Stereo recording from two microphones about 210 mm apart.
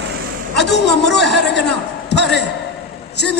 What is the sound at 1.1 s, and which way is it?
A man's voice, 50° left (ahead or behind).